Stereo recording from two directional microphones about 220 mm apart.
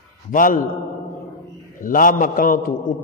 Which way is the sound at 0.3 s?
40° left (ahead or behind).